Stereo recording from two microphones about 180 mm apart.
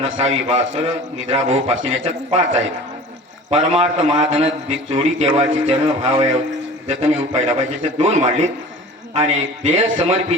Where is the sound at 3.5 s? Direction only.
35° right (ahead or behind).